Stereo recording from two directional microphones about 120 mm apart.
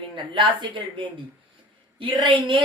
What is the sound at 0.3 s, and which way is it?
A woman's voice, 45° right (ahead or behind).